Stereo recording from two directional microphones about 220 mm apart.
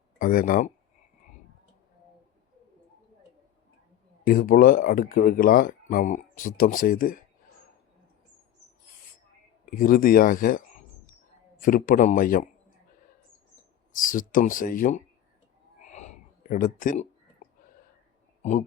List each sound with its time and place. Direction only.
0.2 s speech: 40° left (ahead or behind)
4.2 s speech: 40° left (ahead or behind)
9.6 s speech: 40° left (ahead or behind)
11.6 s speech: 40° left (ahead or behind)
13.9 s speech: 35° left (ahead or behind)
15.8 s a sound: 30° left (ahead or behind)